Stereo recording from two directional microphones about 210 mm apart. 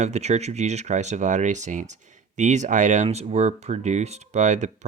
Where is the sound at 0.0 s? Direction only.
30° right (ahead or behind).